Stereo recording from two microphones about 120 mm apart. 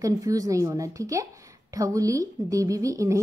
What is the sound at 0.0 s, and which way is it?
A woman's voice, 30° right (ahead or behind).